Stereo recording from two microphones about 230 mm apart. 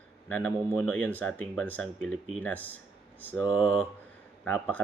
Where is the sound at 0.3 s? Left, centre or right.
Centre.